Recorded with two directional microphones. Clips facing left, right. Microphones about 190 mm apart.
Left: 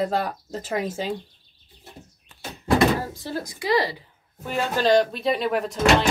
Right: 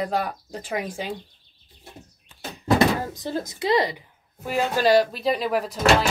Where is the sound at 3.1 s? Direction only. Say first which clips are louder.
Right 2 dB; 20° right (ahead or behind).